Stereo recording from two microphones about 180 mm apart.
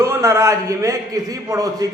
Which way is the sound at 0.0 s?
15° right (ahead or behind).